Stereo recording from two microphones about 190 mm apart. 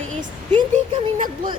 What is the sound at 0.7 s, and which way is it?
Speech, 45° right (ahead or behind).